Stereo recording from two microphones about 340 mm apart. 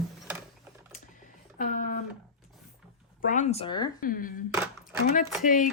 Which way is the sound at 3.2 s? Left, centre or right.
Left.